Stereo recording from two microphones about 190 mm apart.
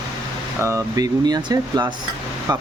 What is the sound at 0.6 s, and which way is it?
Speech, 15° right (ahead or behind).